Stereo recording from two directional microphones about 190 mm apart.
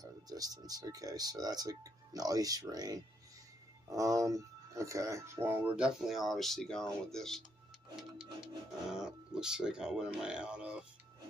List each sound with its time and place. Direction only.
0.0 s speech: 20° right (ahead or behind); by 7.4 s centre (ahead or behind)
8.9 s speech: 5° right (ahead or behind)